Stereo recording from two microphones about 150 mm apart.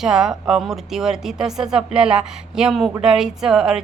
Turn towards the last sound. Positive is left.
turn(degrees=-5)  # may be behind; listen again after turning